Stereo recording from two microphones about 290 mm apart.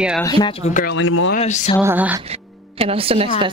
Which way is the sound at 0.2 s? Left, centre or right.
Centre.